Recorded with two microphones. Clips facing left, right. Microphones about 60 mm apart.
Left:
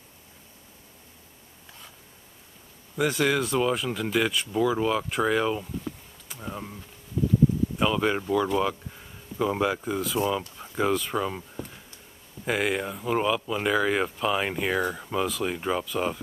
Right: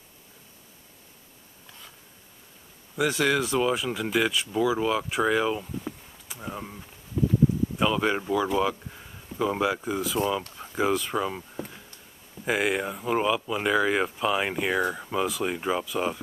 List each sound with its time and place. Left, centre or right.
3.0 s speech: centre
7.2 s a sound: centre
7.7 s speech: centre